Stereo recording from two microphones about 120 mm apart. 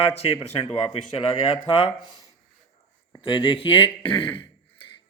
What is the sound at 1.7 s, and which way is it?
Speech, 45° left (ahead or behind).